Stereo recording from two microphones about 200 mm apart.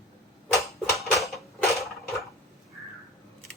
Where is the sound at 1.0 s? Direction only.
Centre (ahead or behind).